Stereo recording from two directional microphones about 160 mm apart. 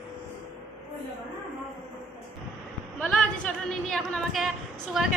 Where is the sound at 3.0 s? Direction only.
5° left (ahead or behind).